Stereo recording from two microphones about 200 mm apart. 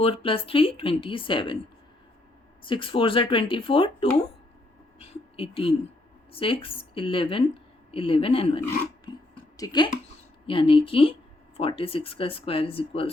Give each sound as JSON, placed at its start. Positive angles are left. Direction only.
{"t": 0.0, "sound": "speech", "side_deg": 30}
{"t": 2.6, "sound": "speech", "side_deg": 25}
{"t": 5.4, "sound": "speech", "side_deg": 25}